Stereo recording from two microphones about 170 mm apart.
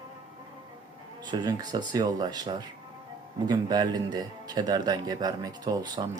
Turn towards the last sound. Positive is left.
turn(degrees=-20)  # may be behind; listen again after turning